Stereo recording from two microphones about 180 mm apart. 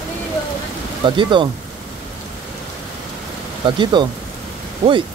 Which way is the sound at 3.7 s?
25° right (ahead or behind).